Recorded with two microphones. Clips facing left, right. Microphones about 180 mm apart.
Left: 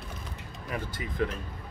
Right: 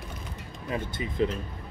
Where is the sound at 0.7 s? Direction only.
25° right (ahead or behind).